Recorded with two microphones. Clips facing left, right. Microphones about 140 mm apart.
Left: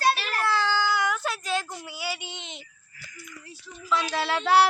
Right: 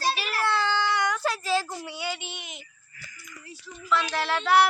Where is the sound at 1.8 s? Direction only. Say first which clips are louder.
Right 1 dB; 5° left (ahead or behind); by 2.6 s 20° left (ahead or behind).